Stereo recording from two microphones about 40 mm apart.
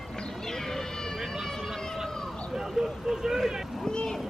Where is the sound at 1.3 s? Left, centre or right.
Centre.